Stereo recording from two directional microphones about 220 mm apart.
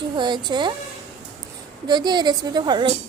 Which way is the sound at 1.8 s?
20° right (ahead or behind).